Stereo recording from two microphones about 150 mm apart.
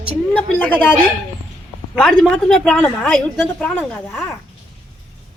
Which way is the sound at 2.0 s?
Centre (ahead or behind).